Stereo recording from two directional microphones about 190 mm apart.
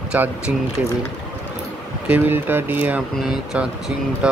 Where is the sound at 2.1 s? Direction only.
10° right (ahead or behind).